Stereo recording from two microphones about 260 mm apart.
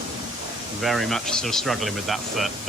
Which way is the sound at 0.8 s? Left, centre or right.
Centre.